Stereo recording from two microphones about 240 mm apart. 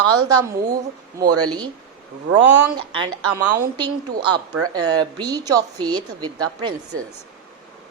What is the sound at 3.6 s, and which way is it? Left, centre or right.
Speech, centre.